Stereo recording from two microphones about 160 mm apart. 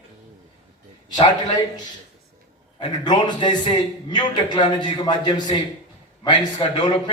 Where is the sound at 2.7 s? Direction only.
30° left (ahead or behind).